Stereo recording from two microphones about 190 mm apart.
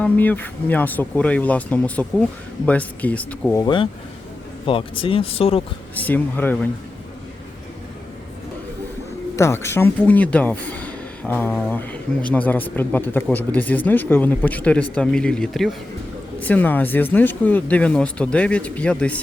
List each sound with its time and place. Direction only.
0.0 s speech: 10° left (ahead or behind)
3.6 s speech: 25° left (ahead or behind)
5.9 s speech: 10° left (ahead or behind)
9.3 s speech: 15° left (ahead or behind)